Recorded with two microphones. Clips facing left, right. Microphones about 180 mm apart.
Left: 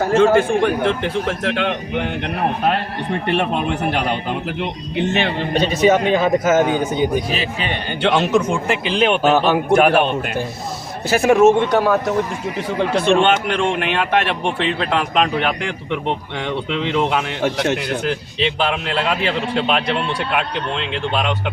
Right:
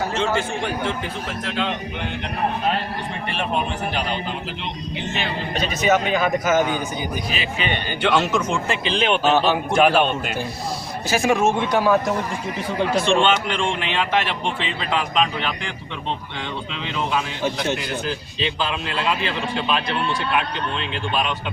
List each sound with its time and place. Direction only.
0.0 s a man's voice: 50° left (ahead or behind)
5.5 s a man's voice: 30° left (ahead or behind)
8.0 s a man's voice: 20° left (ahead or behind)
9.0 s a man's voice: 55° left (ahead or behind)
13.1 s a man's voice: 60° left (ahead or behind)